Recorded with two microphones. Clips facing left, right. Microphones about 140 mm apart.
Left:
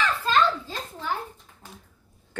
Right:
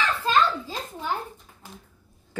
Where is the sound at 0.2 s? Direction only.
15° right (ahead or behind).